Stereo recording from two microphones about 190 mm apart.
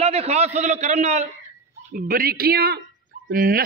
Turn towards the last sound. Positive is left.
turn(degrees=-50)  # may be behind; listen again after turning